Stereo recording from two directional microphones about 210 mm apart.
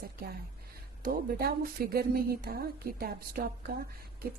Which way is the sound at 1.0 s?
45° right (ahead or behind).